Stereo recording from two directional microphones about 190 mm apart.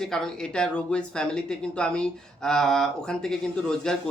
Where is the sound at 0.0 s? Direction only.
5° left (ahead or behind).